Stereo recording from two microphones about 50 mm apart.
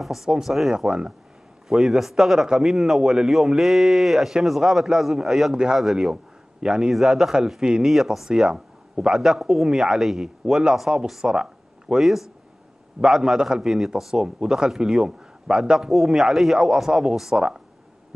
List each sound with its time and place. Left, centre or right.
0.0 s speech: centre
6.6 s speech: centre
6.9 s speech: centre
8.4 s speech: centre
9.1 s speech: centre
12.0 s speech: centre